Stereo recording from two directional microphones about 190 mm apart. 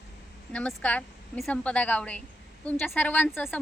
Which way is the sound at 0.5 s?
5° left (ahead or behind).